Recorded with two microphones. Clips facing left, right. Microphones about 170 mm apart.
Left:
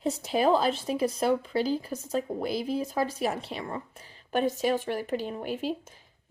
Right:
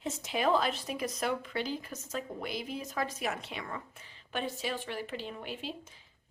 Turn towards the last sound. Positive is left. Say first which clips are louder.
# left 8 dB
turn(degrees=45)  # may be behind; listen again after turning